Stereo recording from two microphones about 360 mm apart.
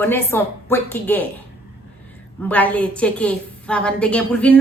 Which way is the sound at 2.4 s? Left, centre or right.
Centre.